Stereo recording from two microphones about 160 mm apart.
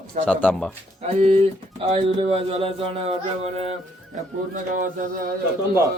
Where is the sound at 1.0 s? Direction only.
40° right (ahead or behind); by 5.3 s 60° right (ahead or behind).